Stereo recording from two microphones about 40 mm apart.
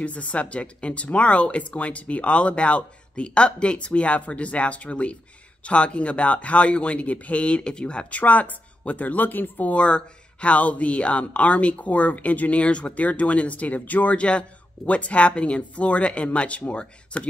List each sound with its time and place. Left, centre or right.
0.0 s speech: left
8.2 s speech: left
9.7 s speech: left
14.1 s a man's voice: left